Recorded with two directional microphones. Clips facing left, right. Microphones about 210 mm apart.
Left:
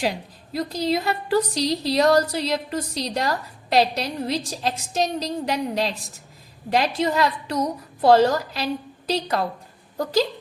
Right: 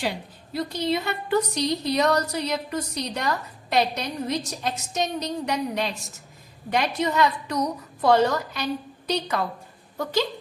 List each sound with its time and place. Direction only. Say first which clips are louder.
0.8 s a woman's voice: left 3 dB; 35° left (ahead or behind)